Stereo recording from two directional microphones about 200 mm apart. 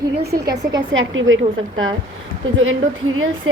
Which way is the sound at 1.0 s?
80° right.